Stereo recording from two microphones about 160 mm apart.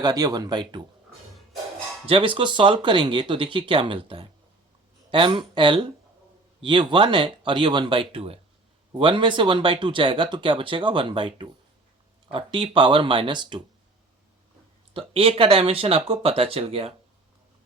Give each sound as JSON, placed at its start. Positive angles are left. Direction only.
{"t": 0.0, "sound": "speech", "side_deg": -25}
{"t": 2.0, "sound": "speech", "side_deg": -30}
{"t": 14.9, "sound": "speech", "side_deg": -35}